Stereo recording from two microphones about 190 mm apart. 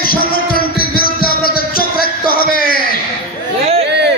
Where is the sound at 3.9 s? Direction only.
65° right (ahead or behind).